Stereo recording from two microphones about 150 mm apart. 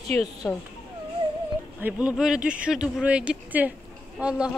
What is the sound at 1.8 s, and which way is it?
Speech, 10° right (ahead or behind).